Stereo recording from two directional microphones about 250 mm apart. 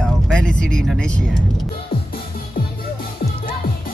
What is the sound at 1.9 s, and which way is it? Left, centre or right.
Music, left.